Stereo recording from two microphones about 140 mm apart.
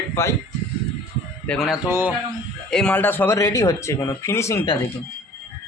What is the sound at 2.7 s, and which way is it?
Speech, 5° left (ahead or behind).